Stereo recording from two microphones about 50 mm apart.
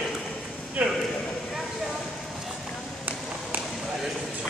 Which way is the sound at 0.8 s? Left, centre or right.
Right.